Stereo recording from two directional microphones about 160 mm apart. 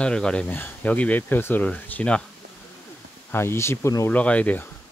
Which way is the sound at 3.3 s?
15° left (ahead or behind).